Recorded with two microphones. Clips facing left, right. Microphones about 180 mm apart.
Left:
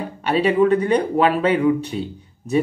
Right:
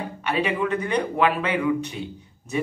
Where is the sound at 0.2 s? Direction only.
35° left (ahead or behind).